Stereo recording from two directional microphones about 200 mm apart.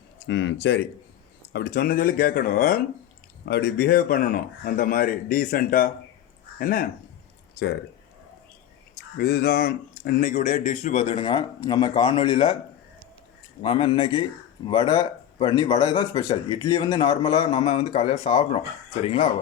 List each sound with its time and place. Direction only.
0.3 s a man's voice: 65° left (ahead or behind); by 2.8 s 45° left (ahead or behind)
3.4 s a man's voice: 55° left (ahead or behind)
7.5 s speech: 55° left (ahead or behind)
9.0 s speech: 50° left (ahead or behind); by 12.5 s 25° left (ahead or behind)
13.6 s speech: 25° left (ahead or behind)